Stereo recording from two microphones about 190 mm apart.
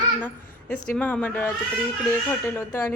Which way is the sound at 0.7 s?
5° left (ahead or behind).